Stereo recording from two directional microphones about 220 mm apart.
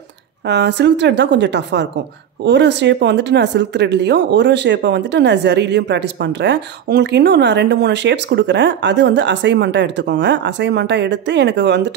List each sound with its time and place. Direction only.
0.5 s speech: 50° right (ahead or behind)